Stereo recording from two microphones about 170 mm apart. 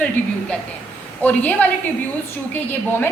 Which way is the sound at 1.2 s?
10° left (ahead or behind).